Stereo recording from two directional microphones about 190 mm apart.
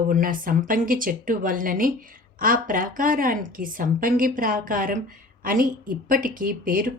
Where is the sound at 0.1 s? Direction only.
45° right (ahead or behind).